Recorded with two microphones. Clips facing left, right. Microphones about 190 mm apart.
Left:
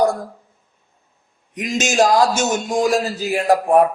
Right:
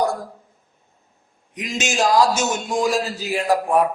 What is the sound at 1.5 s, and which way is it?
Speech, 45° left (ahead or behind).